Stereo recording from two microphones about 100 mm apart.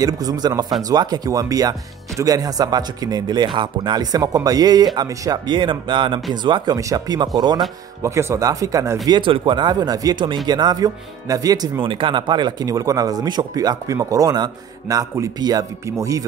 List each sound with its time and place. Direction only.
0.0 s speech: 40° right (ahead or behind)
5.5 s speech: 55° right (ahead or behind)
6.8 s speech: 35° right (ahead or behind)
8.0 s speech: 30° right (ahead or behind)
9.2 s speech: 55° right (ahead or behind); by 11.8 s 40° right (ahead or behind)
11.8 s speech: 60° right (ahead or behind); by 16.3 s 35° right (ahead or behind)